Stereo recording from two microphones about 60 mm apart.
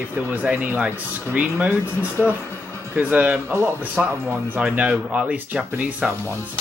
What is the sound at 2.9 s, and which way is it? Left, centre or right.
Speech, right.